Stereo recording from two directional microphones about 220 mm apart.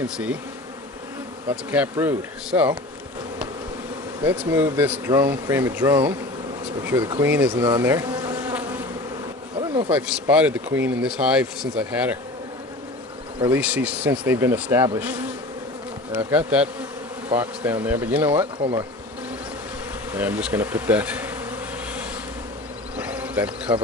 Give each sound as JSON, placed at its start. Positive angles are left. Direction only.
{"t": 1.5, "sound": "speech", "side_deg": -5}
{"t": 4.2, "sound": "speech", "side_deg": -10}
{"t": 7.5, "sound": "bee", "side_deg": -15}
{"t": 9.9, "sound": "speech", "side_deg": -5}
{"t": 13.5, "sound": "speech", "side_deg": -5}
{"t": 20.1, "sound": "speech", "side_deg": -5}
{"t": 23.0, "sound": "a sound", "side_deg": -5}